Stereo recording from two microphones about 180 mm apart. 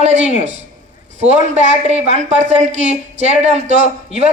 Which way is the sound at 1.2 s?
40° right (ahead or behind).